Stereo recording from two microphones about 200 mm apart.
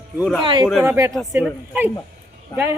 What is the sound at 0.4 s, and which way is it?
A woman's voice, 20° right (ahead or behind).